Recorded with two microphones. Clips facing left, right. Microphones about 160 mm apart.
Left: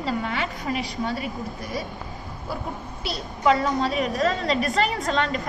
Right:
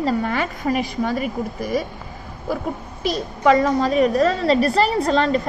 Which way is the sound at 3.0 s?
45° right (ahead or behind).